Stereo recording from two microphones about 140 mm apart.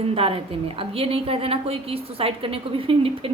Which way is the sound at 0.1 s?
40° right (ahead or behind).